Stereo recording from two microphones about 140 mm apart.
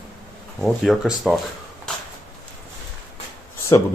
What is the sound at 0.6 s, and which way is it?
Speech, centre (ahead or behind).